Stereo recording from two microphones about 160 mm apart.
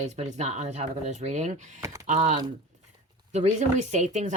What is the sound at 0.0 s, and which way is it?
Speech, 45° right (ahead or behind).